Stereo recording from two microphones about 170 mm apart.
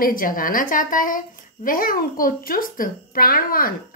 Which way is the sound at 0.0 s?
55° left (ahead or behind).